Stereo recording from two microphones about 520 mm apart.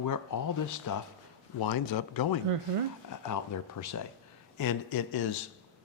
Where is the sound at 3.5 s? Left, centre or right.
Left.